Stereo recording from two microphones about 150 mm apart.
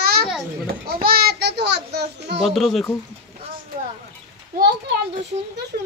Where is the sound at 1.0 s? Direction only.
90° right.